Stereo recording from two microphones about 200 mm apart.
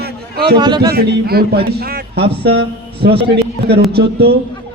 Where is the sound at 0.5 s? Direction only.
20° right (ahead or behind).